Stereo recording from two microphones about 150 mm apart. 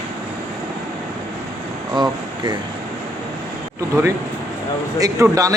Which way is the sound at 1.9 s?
30° right (ahead or behind).